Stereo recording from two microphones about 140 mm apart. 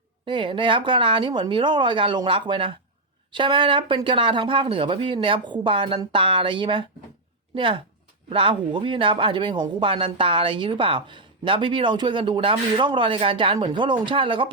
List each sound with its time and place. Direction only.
0.3 s speech: 35° right (ahead or behind)